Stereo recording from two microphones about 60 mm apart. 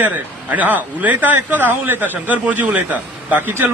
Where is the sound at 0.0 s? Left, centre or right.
Right.